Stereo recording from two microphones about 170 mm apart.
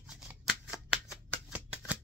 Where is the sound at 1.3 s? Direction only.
10° right (ahead or behind).